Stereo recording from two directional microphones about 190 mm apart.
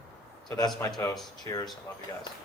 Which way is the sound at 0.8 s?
10° left (ahead or behind).